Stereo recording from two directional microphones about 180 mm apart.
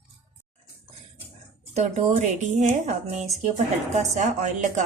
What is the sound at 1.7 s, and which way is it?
A woman's voice, 40° right (ahead or behind).